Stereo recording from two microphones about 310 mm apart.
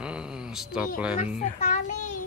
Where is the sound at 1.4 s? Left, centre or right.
Left.